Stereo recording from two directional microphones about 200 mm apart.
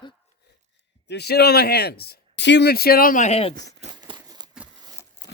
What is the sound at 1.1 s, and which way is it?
Speech, 55° left (ahead or behind).